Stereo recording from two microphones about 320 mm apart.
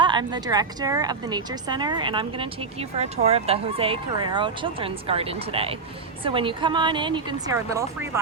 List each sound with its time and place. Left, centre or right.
0.0 s speech: centre